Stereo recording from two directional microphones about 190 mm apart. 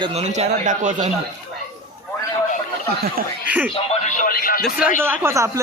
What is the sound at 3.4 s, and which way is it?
Speech, 10° right (ahead or behind).